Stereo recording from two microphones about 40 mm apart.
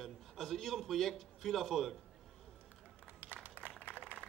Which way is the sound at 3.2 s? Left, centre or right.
Right.